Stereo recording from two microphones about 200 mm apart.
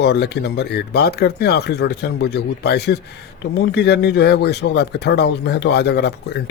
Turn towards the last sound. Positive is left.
turn(degrees=55)  # may be behind; listen again after turning